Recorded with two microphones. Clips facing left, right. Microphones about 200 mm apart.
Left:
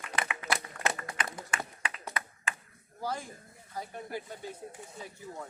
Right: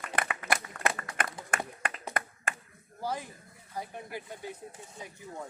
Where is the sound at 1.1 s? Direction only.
55° right (ahead or behind).